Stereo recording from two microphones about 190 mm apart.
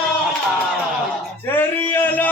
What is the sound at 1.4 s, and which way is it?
Speech, 10° left (ahead or behind).